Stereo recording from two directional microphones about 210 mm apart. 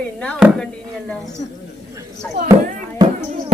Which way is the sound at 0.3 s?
Centre (ahead or behind).